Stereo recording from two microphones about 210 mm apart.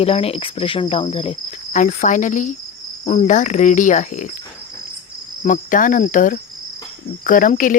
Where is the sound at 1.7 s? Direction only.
35° left (ahead or behind).